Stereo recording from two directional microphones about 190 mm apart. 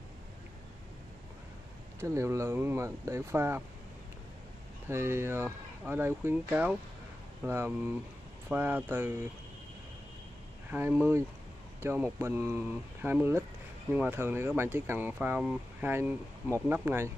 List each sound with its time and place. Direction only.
2.0 s speech: 15° right (ahead or behind)
4.8 s speech: 15° right (ahead or behind)
10.7 s speech: 10° right (ahead or behind)